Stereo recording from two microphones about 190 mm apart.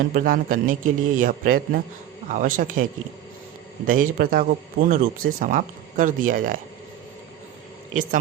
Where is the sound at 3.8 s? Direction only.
45° right (ahead or behind).